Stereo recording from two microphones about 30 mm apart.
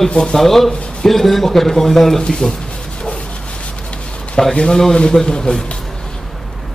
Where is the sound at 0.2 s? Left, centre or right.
Centre.